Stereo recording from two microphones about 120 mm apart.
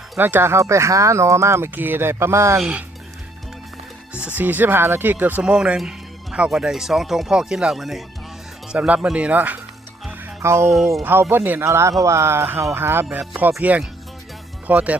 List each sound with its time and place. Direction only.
0.2 s speech: 15° right (ahead or behind)
2.6 s speech: 5° right (ahead or behind)
4.1 s speech: 10° right (ahead or behind)
10.1 s music: 20° right (ahead or behind)
10.7 s speech: centre (ahead or behind)
11.0 s speech: 15° right (ahead or behind)